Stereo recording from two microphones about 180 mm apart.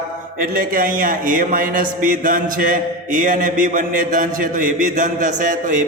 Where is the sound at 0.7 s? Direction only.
50° right (ahead or behind).